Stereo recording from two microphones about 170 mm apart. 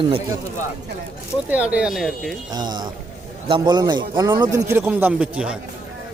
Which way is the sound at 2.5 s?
25° right (ahead or behind).